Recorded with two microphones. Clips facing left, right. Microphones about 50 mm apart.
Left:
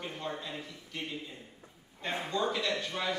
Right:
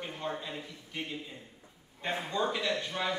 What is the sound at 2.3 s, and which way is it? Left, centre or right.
Speech, centre.